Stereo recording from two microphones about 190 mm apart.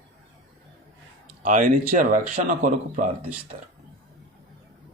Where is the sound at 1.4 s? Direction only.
45° right (ahead or behind).